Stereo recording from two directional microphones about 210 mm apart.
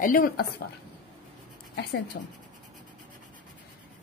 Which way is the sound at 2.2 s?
55° left (ahead or behind).